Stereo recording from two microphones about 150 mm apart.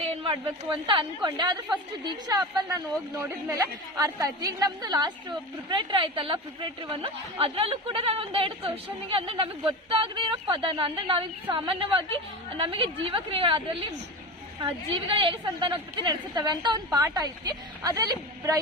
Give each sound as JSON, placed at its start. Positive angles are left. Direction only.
{"t": 0.0, "sound": "speech", "side_deg": -40}
{"t": 2.6, "sound": "a woman's voice", "side_deg": -20}